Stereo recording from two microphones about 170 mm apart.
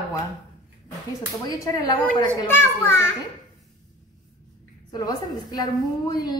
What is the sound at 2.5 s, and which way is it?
Speech, 15° left (ahead or behind).